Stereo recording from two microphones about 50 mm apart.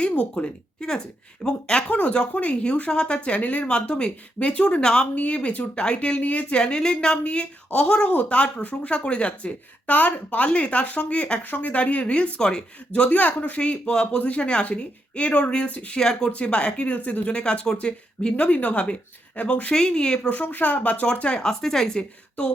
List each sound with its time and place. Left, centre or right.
0.0 s speech: left
0.3 s speech: centre
1.9 s speech: left
6.6 s speech: centre
16.0 s speech: centre
16.3 s speech: left
19.7 s speech: centre
20.3 s speech: left
21.1 s speech: left
21.6 s speech: centre